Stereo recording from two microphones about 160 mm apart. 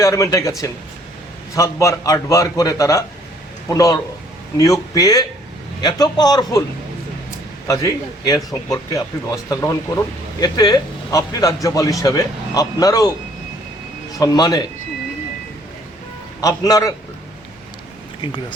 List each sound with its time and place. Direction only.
0.0 s speech: 20° left (ahead or behind)
1.5 s speech: 20° left (ahead or behind)
7.7 s speech: 20° left (ahead or behind)
14.2 s speech: 25° left (ahead or behind)
16.4 s speech: 20° left (ahead or behind)